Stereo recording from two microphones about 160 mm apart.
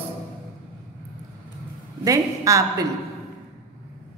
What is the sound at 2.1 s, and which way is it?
Speech, 20° right (ahead or behind).